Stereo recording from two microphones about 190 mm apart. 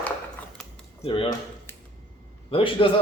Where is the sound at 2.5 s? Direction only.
25° left (ahead or behind).